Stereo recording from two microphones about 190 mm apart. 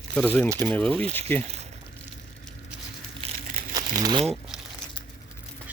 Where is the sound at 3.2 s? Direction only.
30° right (ahead or behind).